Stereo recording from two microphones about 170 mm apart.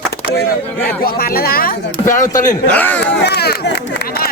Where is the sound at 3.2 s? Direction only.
70° left (ahead or behind).